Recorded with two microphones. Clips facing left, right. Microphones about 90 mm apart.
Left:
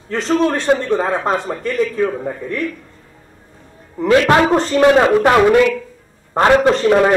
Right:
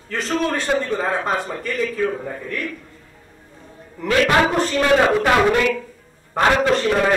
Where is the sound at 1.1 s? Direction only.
Centre (ahead or behind).